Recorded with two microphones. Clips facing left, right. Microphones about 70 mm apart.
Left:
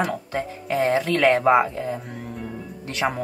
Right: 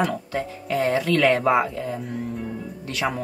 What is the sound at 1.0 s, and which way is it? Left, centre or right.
Speech, centre.